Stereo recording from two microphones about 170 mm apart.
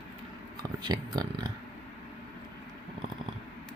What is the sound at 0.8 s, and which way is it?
Speech, 25° right (ahead or behind).